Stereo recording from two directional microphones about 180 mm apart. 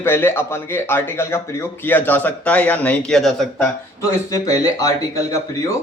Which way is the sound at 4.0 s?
20° left (ahead or behind).